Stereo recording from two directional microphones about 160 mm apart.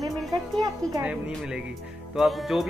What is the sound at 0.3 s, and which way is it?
Speech, 20° right (ahead or behind).